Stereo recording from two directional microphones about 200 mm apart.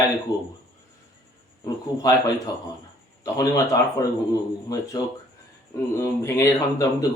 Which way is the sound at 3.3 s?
15° left (ahead or behind).